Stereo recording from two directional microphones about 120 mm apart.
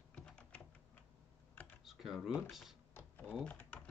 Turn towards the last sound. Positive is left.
turn(degrees=10)  # may be behind; listen again after turning